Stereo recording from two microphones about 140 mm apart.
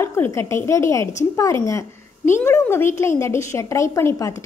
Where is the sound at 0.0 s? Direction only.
15° left (ahead or behind).